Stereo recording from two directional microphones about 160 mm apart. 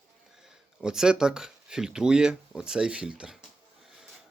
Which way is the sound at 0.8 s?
5° right (ahead or behind).